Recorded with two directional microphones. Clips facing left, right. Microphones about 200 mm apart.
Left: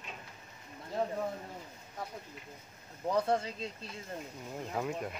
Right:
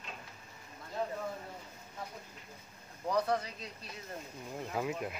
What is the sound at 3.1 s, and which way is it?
Speech, 25° left (ahead or behind).